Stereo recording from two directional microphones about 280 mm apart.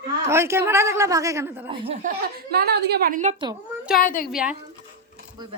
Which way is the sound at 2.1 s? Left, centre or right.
Right.